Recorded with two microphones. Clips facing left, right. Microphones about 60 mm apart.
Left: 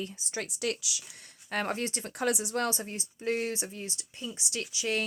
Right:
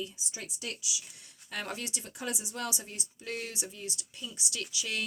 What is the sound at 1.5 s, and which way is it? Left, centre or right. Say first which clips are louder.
Speech: left 6 dB; left.